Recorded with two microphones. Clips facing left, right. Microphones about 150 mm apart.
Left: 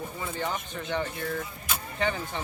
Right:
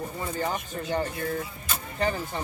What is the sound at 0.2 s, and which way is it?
Speech, 40° right (ahead or behind).